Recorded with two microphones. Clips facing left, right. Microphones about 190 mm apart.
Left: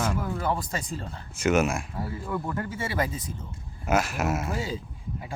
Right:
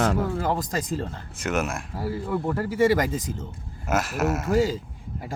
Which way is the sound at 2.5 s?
35° right (ahead or behind).